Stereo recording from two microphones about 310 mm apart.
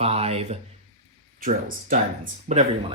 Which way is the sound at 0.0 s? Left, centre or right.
Centre.